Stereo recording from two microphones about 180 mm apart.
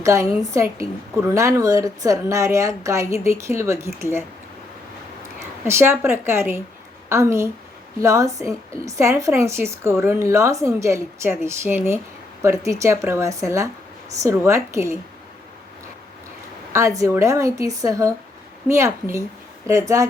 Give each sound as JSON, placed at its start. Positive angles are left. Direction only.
{"t": 0.0, "sound": "a woman's voice", "side_deg": -15}
{"t": 5.4, "sound": "a woman's voice", "side_deg": -15}
{"t": 16.7, "sound": "a woman's voice", "side_deg": -15}